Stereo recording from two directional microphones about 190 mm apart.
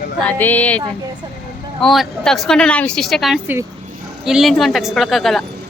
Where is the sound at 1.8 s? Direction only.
Centre (ahead or behind).